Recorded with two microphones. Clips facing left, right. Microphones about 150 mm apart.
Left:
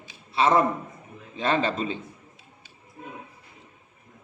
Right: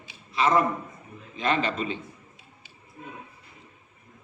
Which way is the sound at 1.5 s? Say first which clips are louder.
Left 3 dB; 30° left (ahead or behind).